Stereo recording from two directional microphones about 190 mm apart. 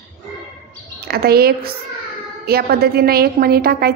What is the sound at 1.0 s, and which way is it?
A woman's voice, 55° right (ahead or behind).